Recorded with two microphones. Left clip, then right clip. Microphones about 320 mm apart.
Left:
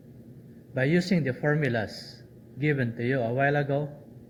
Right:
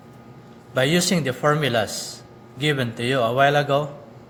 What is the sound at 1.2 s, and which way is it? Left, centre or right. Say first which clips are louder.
Speech: right 7 dB; right.